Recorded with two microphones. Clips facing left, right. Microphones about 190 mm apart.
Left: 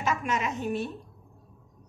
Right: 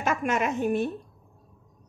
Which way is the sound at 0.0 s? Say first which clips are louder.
Right 3 dB; 55° right (ahead or behind).